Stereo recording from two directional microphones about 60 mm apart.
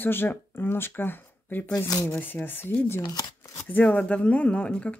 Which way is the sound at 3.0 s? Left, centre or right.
Left.